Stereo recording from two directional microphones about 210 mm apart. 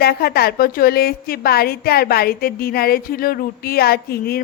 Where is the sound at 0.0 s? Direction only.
50° left (ahead or behind).